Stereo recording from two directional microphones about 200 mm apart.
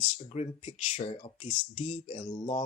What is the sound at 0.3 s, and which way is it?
Speech, 30° left (ahead or behind).